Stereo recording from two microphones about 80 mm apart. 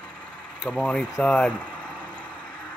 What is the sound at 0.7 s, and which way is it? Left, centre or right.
Speech, centre.